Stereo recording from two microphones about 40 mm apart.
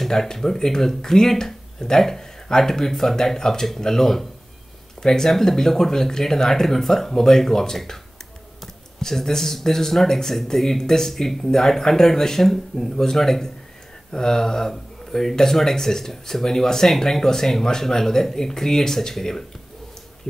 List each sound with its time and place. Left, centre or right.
0.0 s speech: centre
9.0 s speech: centre